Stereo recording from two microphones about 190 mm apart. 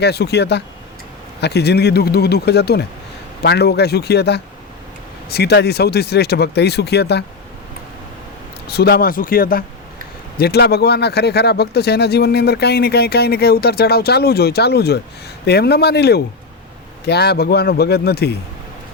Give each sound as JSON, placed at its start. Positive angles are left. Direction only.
{"t": 0.0, "sound": "speech", "side_deg": 60}
{"t": 8.6, "sound": "speech", "side_deg": 55}